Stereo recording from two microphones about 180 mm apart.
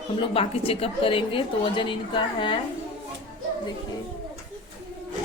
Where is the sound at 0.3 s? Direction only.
30° left (ahead or behind).